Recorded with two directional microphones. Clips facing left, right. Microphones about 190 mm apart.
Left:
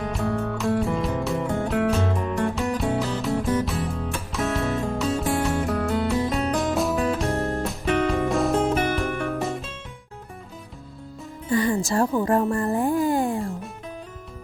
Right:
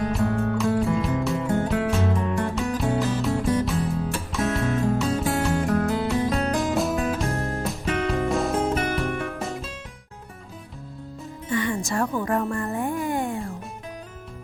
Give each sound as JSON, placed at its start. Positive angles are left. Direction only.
{"t": 0.1, "sound": "music", "side_deg": 0}
{"t": 11.4, "sound": "music", "side_deg": 35}